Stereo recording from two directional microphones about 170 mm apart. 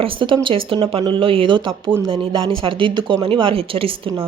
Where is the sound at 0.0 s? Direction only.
30° right (ahead or behind).